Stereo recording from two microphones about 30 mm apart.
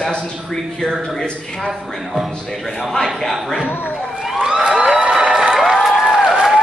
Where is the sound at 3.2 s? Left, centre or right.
Centre.